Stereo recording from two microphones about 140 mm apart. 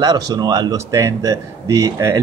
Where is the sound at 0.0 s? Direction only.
30° right (ahead or behind).